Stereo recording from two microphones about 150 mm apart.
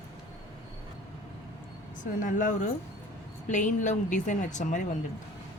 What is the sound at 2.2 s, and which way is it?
A woman's voice, 55° left (ahead or behind).